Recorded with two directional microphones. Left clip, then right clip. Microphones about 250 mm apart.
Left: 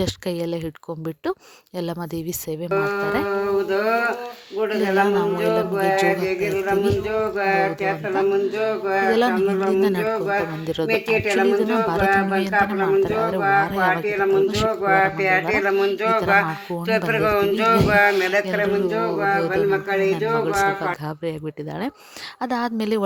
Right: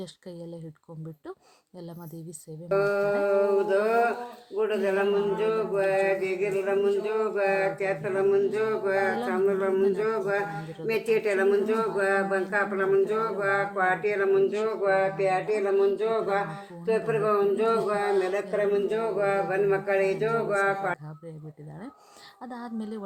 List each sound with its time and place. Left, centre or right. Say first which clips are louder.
0.0 s a man's voice: left 16 dB; left
2.7 s a man's voice: left 2 dB; left
18.1 s a man's voice: left 6 dB; left
22.4 s a man's voice: left 14 dB; left